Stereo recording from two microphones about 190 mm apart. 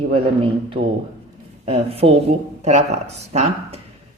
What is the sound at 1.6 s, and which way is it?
Speech, 35° right (ahead or behind).